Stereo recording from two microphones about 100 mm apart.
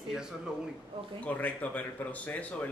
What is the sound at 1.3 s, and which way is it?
Speech, 15° left (ahead or behind).